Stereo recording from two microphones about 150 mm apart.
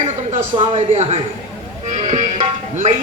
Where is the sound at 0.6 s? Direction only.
40° right (ahead or behind).